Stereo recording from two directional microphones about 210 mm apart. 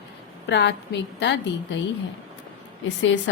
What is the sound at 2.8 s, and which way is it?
Speech, 60° left (ahead or behind).